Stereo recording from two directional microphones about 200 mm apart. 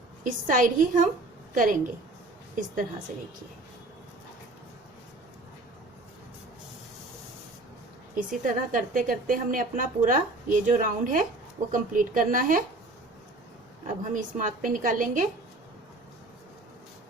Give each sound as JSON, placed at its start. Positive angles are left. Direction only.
{"t": 0.3, "sound": "a woman's voice", "side_deg": -40}
{"t": 8.1, "sound": "a woman's voice", "side_deg": -40}
{"t": 13.8, "sound": "a woman's voice", "side_deg": -40}